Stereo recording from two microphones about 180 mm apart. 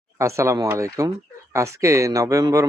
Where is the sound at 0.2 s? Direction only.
15° right (ahead or behind).